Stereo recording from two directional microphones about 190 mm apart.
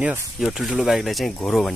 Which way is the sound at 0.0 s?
10° right (ahead or behind).